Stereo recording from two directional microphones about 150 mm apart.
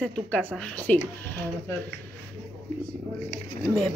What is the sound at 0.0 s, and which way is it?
Speech, 5° left (ahead or behind).